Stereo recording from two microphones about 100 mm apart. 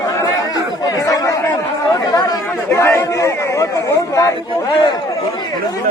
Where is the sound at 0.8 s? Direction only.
35° left (ahead or behind).